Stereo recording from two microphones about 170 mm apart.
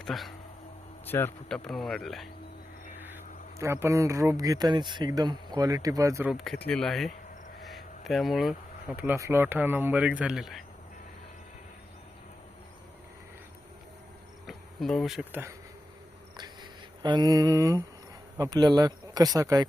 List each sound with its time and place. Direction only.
0.0 s speech: centre (ahead or behind)
1.0 s speech: 10° left (ahead or behind)
3.6 s speech: 15° right (ahead or behind)
6.3 s speech: centre (ahead or behind)
7.6 s a sound: centre (ahead or behind)
9.0 s speech: 15° right (ahead or behind)
14.4 s speech: centre (ahead or behind)
17.0 s speech: 25° right (ahead or behind)